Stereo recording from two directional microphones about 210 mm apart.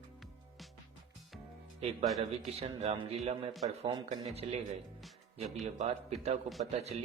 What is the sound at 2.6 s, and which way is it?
Speech, 30° right (ahead or behind).